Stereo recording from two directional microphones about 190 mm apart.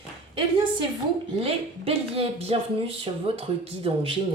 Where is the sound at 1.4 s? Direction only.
30° right (ahead or behind).